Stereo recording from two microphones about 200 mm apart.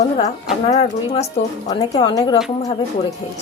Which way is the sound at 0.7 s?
25° left (ahead or behind).